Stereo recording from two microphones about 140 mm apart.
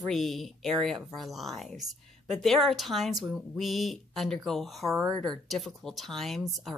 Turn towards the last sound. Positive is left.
turn(degrees=0)  # may be behind; listen again after turning